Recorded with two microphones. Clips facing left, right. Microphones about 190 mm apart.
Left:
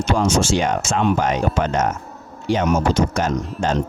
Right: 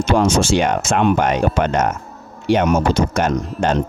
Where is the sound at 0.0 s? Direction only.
60° right (ahead or behind).